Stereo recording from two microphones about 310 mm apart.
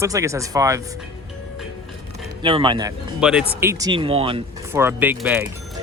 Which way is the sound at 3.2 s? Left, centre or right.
Centre.